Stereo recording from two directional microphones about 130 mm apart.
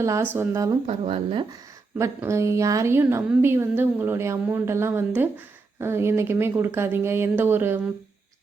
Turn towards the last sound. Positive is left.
turn(degrees=-15)  # may be behind; listen again after turning